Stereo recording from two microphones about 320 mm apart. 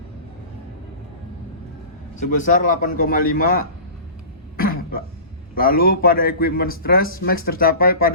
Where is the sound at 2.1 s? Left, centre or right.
Left.